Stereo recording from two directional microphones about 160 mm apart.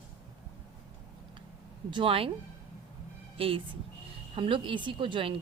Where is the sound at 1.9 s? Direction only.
35° right (ahead or behind).